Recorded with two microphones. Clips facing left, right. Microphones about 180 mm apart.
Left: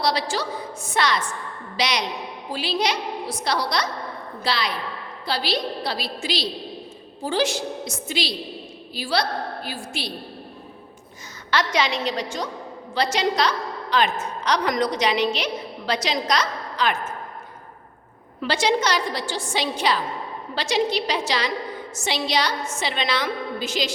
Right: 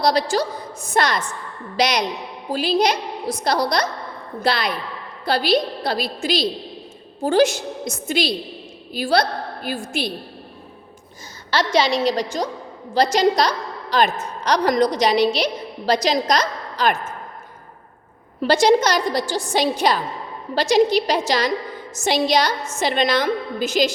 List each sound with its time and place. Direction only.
0.0 s a woman's voice: 45° right (ahead or behind)
11.5 s a woman's voice: 30° right (ahead or behind)
18.4 s a woman's voice: 40° right (ahead or behind)